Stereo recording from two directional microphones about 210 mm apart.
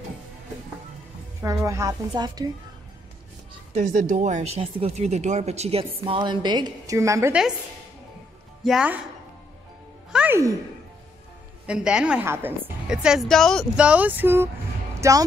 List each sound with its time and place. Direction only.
1.4 s a woman's voice: 15° right (ahead or behind)
3.7 s speech: 35° right (ahead or behind); by 7.3 s 15° right (ahead or behind)
8.6 s a woman's voice: 5° right (ahead or behind)
10.1 s music: 10° right (ahead or behind)
11.6 s a woman's voice: 5° right (ahead or behind)